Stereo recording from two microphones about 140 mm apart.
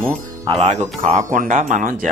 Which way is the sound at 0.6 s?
55° right (ahead or behind).